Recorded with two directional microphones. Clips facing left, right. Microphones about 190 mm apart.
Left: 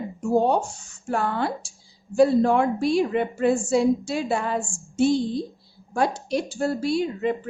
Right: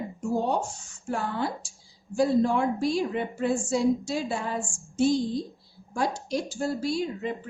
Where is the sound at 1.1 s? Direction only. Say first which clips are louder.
Left 4 dB; 65° left (ahead or behind).